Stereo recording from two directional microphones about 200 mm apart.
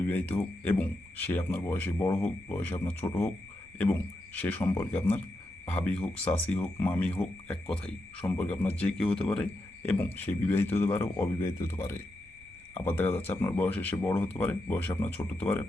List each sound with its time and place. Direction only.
0.0 s speech: 10° left (ahead or behind)
4.4 s speech: 10° left (ahead or behind)